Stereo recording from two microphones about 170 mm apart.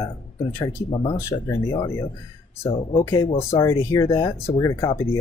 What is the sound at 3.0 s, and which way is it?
Speech, 20° left (ahead or behind).